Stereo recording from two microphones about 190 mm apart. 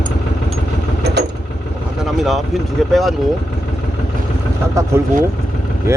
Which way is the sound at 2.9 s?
Centre (ahead or behind).